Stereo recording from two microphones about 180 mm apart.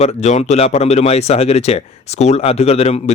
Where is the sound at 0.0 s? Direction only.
40° left (ahead or behind).